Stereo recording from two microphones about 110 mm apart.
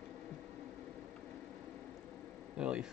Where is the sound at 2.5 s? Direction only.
10° right (ahead or behind).